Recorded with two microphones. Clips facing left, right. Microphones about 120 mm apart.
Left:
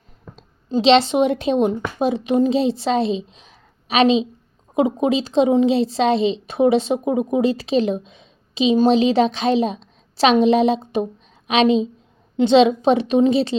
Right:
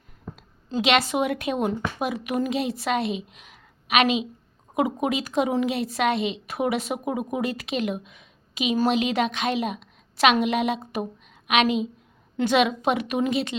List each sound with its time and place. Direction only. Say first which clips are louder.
0.3 s a woman's voice: left 6 dB; 30° left (ahead or behind)